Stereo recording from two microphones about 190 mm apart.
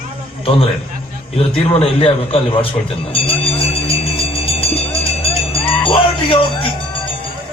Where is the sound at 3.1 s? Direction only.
30° left (ahead or behind).